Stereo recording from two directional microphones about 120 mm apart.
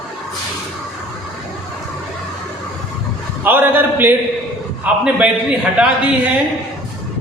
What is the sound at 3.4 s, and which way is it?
A man's voice, 15° right (ahead or behind).